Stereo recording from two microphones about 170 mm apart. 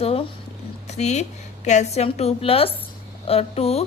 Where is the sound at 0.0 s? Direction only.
35° left (ahead or behind).